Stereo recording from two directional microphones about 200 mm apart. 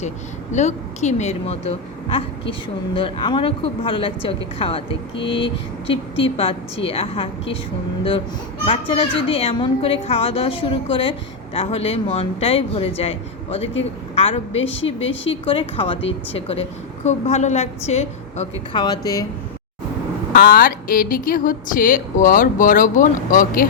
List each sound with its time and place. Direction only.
0.5 s a woman's voice: 35° left (ahead or behind)
8.6 s a child's voice: 25° left (ahead or behind)
18.8 s a child's voice: 20° left (ahead or behind)
20.3 s speech: 45° left (ahead or behind)